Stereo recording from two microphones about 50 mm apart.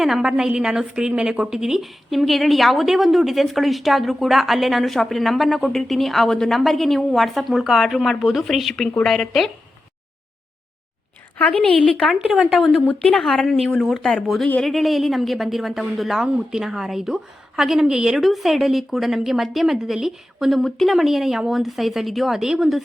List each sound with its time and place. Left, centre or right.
0.0 s a woman's voice: centre
11.3 s a woman's voice: left
12.0 s a woman's voice: centre